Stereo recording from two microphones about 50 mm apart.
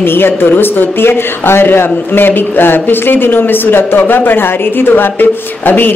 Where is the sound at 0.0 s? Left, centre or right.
Left.